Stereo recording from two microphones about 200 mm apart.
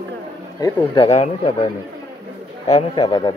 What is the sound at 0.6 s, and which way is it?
Speech, 25° left (ahead or behind).